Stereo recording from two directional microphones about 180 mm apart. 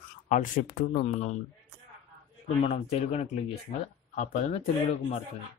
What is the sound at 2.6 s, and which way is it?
Speech, 35° left (ahead or behind).